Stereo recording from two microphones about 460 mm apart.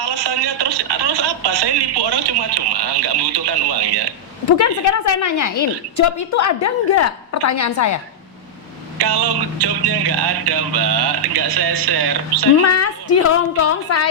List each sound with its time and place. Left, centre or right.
0.0 s speech: right
4.5 s a woman's voice: left
9.0 s speech: right
12.6 s a woman's voice: left